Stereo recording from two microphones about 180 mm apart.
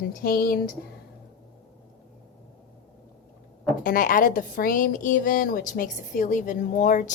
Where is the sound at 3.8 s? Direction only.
50° left (ahead or behind).